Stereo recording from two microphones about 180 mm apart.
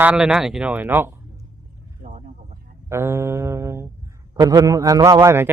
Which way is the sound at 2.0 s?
45° right (ahead or behind).